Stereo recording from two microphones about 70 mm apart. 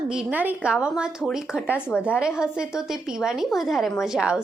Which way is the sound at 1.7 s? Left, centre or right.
Left.